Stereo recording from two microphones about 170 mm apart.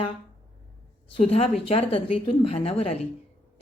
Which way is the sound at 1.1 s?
35° left (ahead or behind).